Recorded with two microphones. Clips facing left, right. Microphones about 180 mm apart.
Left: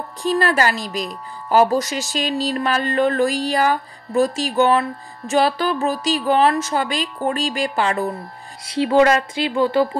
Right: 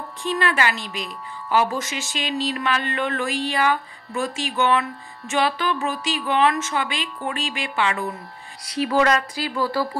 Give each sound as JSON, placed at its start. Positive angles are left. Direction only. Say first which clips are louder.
{"t": 0.2, "sound": "speech", "louder": "left 4 dB", "side_deg": 40}
{"t": 8.6, "sound": "speech", "louder": "left 5 dB", "side_deg": 25}